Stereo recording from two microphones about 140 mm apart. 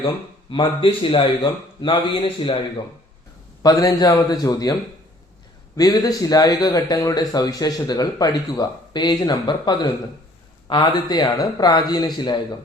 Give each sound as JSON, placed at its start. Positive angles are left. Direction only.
{"t": 0.5, "sound": "a man's voice", "side_deg": 35}
{"t": 3.6, "sound": "speech", "side_deg": 25}